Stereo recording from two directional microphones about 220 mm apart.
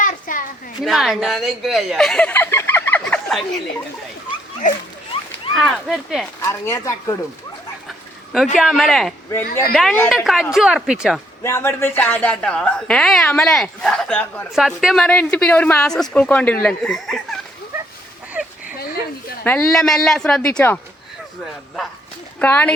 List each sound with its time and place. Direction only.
0.0 s a sound: 35° left (ahead or behind)
0.8 s speech: centre (ahead or behind)
5.5 s a woman's voice: centre (ahead or behind)
6.4 s speech: 15° left (ahead or behind)
7.9 s a sound: centre (ahead or behind)
8.5 s a woman's voice: centre (ahead or behind)
11.4 s a woman's voice: 10° left (ahead or behind)
18.6 s a sound: 40° left (ahead or behind)
19.5 s a woman's voice: 5° left (ahead or behind)
22.4 s speech: 5° left (ahead or behind)